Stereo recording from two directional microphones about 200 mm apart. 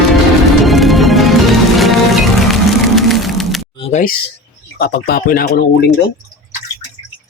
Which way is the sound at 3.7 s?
30° left (ahead or behind).